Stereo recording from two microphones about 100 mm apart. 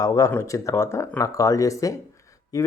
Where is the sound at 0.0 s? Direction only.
35° left (ahead or behind).